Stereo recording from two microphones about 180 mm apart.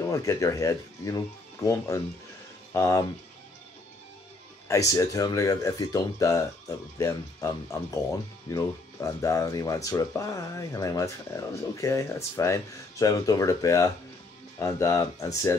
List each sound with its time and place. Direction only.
0.0 s speech: 20° left (ahead or behind)
4.6 s speech: 20° left (ahead or behind)